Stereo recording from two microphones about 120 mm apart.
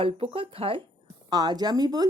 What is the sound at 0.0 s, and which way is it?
Speech, 55° right (ahead or behind).